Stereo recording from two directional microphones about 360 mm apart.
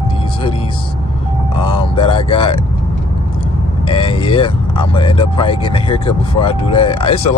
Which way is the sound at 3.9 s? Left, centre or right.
Centre.